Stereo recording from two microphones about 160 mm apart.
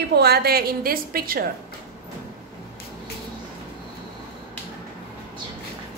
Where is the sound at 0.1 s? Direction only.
90° right; by 1.4 s 65° right (ahead or behind).